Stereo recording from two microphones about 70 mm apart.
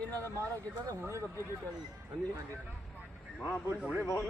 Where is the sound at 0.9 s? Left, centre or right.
Right.